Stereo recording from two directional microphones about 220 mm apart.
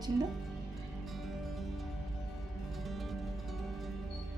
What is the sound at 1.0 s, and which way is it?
Music, centre (ahead or behind).